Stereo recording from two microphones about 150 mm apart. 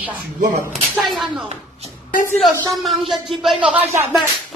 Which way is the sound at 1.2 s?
Centre (ahead or behind).